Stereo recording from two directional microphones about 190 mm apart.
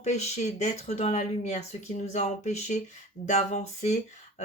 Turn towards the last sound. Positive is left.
turn(degrees=35)  # may be behind; listen again after turning